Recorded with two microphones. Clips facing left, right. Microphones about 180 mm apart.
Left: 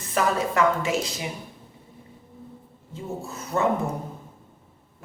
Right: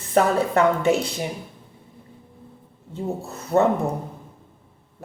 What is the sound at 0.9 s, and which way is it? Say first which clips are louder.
Speech: right 6 dB; 60° right (ahead or behind).